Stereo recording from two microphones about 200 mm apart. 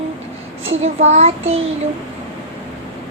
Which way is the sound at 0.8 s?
30° right (ahead or behind).